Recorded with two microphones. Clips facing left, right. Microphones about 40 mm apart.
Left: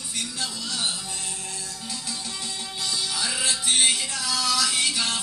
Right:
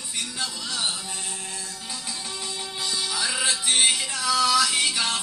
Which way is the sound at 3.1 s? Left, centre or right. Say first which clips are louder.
Right 3 dB; centre.